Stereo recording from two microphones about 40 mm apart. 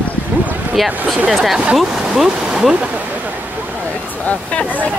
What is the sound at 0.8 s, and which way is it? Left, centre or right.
Speech, centre.